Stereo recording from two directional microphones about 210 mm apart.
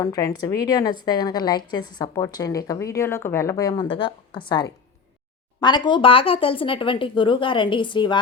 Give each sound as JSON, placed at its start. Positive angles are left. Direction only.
{"t": 0.0, "sound": "a woman's voice", "side_deg": 15}